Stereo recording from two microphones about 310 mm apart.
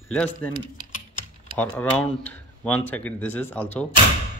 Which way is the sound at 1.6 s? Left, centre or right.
Centre.